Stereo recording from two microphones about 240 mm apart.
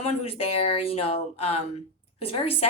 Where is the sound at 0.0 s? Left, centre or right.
Left.